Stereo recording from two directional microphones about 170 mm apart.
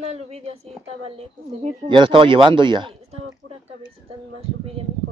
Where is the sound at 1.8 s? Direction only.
30° right (ahead or behind).